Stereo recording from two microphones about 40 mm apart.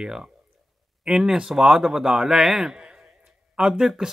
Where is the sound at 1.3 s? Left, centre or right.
Right.